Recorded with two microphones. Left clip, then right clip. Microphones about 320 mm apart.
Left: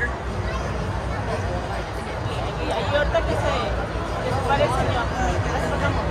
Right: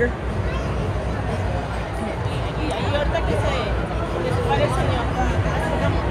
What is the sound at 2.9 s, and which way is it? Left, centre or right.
Hubbub, left.